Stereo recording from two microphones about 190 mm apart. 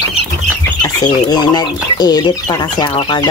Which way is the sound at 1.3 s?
20° left (ahead or behind).